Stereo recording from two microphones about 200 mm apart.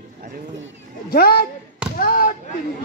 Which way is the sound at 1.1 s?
50° left (ahead or behind).